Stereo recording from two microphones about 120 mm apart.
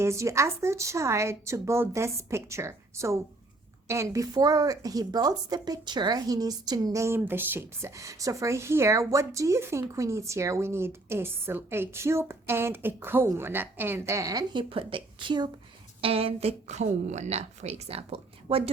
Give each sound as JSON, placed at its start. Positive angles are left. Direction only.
{"t": 0.0, "sound": "a woman's voice", "side_deg": -25}
{"t": 14.7, "sound": "a woman's voice", "side_deg": -50}
{"t": 16.0, "sound": "a woman's voice", "side_deg": -50}